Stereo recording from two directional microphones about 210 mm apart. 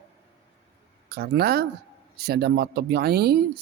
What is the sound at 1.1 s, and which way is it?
Speech, 50° right (ahead or behind).